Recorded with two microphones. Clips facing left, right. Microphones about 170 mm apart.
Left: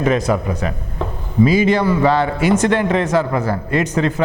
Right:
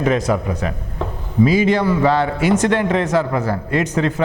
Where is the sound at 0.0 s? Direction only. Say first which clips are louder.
Left 1 dB; 20° left (ahead or behind).